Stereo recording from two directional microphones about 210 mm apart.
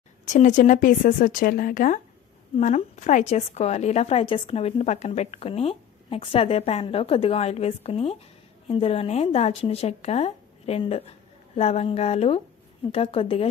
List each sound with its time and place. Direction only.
0.3 s a woman's voice: 35° left (ahead or behind)